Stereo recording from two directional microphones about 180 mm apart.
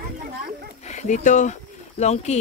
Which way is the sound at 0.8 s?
40° left (ahead or behind).